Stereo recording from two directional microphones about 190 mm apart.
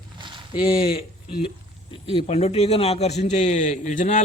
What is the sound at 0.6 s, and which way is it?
A man's voice, 30° left (ahead or behind).